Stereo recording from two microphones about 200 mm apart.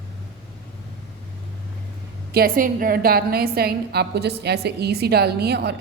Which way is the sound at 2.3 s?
45° right (ahead or behind).